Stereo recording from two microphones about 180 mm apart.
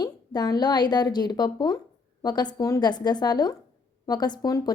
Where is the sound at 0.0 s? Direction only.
20° left (ahead or behind).